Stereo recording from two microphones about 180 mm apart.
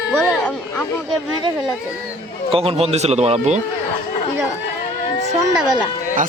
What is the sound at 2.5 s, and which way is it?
A man's voice, 30° right (ahead or behind).